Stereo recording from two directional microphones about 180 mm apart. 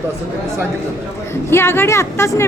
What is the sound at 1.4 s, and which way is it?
Speech, 15° left (ahead or behind).